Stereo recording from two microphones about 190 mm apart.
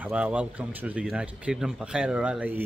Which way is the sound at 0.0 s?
5° right (ahead or behind).